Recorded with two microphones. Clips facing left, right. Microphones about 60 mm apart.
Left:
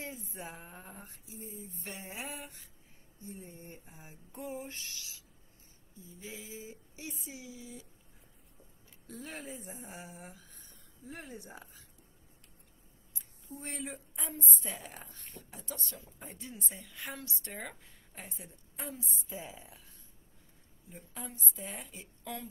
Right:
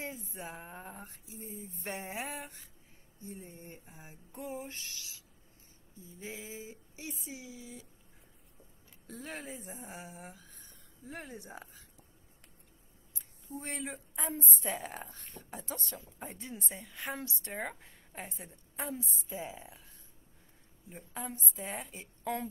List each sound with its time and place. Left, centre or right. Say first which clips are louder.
0.3 s a woman's voice: right 2 dB; right
9.0 s speech: right 1 dB; right
13.5 s a woman's voice: right 2 dB; right
20.9 s speech: right 4 dB; right